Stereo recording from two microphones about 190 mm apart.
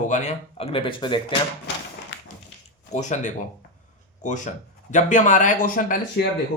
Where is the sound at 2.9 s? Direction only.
40° left (ahead or behind).